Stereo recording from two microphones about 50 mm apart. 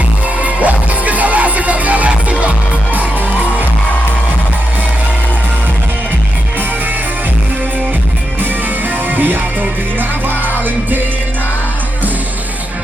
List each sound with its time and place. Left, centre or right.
0.4 s music: right
9.1 s music: right